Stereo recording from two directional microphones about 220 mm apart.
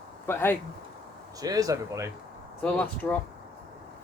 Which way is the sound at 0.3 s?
10° left (ahead or behind).